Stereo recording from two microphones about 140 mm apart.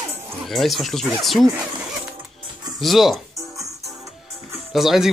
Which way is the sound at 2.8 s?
Centre (ahead or behind).